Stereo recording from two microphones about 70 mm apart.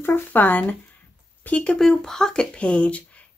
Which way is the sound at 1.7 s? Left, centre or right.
Centre.